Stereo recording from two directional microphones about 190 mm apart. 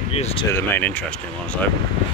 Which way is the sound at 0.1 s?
30° left (ahead or behind).